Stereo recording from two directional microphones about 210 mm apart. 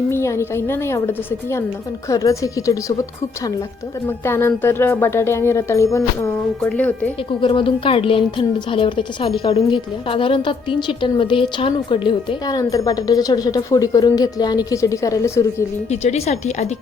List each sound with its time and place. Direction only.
0.1 s speech: 15° left (ahead or behind)
4.0 s speech: 10° left (ahead or behind)
7.4 s a woman's voice: 25° left (ahead or behind)
15.9 s speech: 30° left (ahead or behind)